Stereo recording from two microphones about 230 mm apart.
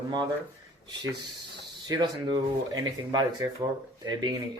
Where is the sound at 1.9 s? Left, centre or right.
Centre.